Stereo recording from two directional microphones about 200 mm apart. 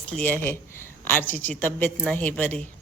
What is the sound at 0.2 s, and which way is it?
A woman's voice, 10° left (ahead or behind).